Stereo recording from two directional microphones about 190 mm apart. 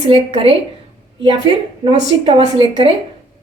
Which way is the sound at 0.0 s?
30° right (ahead or behind).